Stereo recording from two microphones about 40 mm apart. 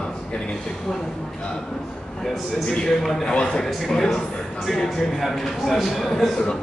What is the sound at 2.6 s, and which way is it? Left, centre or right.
Speech, centre.